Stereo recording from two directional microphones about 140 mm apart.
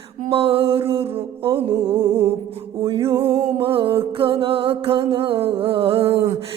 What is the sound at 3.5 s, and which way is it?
Music, 40° right (ahead or behind).